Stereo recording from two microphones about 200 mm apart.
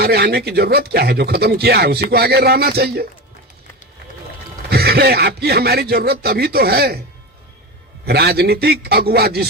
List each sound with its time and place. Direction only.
0.0 s speech: 55° right (ahead or behind)
4.7 s speech: 50° right (ahead or behind)
8.0 s speech: 50° right (ahead or behind)